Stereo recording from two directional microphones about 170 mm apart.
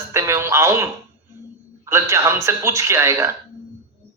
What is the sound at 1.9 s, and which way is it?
Speech, 15° right (ahead or behind).